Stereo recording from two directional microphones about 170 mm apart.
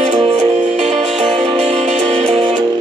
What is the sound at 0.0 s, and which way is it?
Music, 40° right (ahead or behind).